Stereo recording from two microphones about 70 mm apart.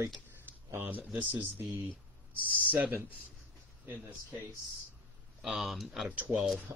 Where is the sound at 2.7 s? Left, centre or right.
Right.